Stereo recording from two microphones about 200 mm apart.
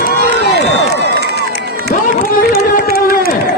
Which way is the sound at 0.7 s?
55° right (ahead or behind).